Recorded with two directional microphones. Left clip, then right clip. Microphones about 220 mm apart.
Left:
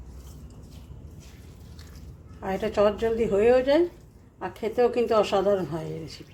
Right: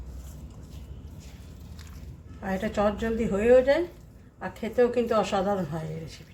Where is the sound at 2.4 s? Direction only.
20° left (ahead or behind).